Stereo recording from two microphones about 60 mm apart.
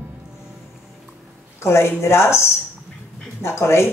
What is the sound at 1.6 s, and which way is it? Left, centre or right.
Speech, left.